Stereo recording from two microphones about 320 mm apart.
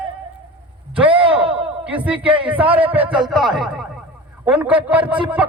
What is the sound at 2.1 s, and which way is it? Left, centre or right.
Speech, centre.